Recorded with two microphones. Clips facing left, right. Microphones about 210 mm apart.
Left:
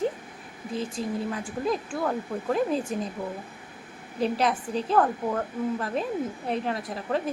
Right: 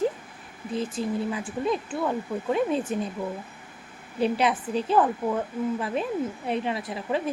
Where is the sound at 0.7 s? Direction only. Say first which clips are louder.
Right 2 dB; centre (ahead or behind).